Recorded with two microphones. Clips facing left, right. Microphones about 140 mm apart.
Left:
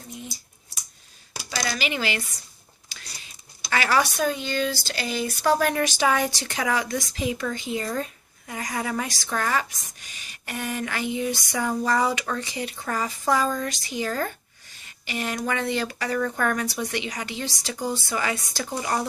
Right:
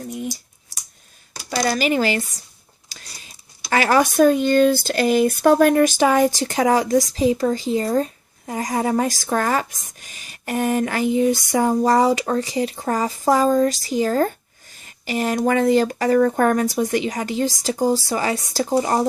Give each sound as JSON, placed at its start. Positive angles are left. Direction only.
{"t": 0.1, "sound": "speech", "side_deg": -70}
{"t": 1.5, "sound": "speech", "side_deg": -40}